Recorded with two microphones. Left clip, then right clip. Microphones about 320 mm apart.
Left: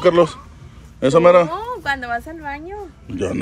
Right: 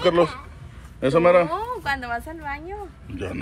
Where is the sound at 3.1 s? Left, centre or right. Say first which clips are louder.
Left 9 dB; left.